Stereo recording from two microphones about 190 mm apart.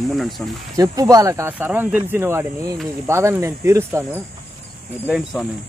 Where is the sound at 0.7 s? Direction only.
20° right (ahead or behind).